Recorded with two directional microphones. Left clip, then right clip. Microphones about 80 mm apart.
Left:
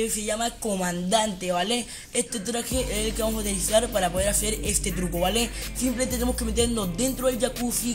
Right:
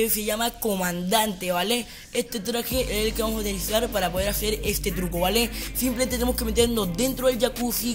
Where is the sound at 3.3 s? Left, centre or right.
Centre.